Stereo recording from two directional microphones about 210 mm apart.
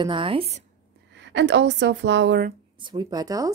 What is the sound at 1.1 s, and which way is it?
A woman's voice, 55° right (ahead or behind).